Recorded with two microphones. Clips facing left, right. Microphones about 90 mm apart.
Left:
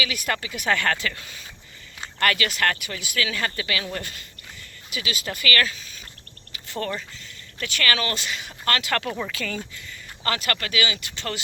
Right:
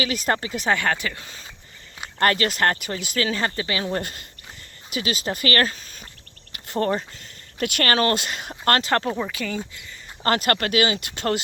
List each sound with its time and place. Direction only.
0.0 s speech: 40° right (ahead or behind)
0.6 s speech: 20° right (ahead or behind)
4.0 s speech: 45° right (ahead or behind)
8.8 s speech: 30° right (ahead or behind)
9.1 s speech: 15° right (ahead or behind)
10.2 s speech: 45° right (ahead or behind)